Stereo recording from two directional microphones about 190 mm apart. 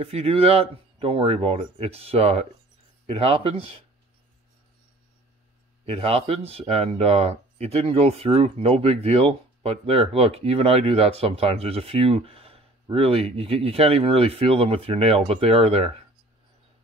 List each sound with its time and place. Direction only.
0.0 s speech: 30° right (ahead or behind)
5.9 s speech: 30° right (ahead or behind)